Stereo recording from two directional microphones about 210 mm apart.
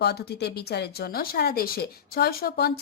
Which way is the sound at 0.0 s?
50° left (ahead or behind).